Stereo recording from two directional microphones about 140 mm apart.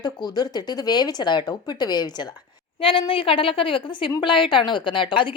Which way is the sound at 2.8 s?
40° left (ahead or behind).